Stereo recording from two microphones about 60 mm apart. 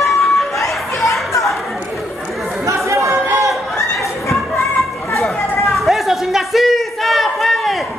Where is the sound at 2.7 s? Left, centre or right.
Right.